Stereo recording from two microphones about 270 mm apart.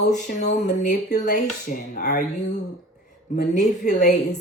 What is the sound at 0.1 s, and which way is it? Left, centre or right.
Speech, left.